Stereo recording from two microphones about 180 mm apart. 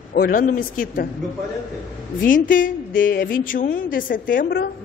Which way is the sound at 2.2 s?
50° left (ahead or behind).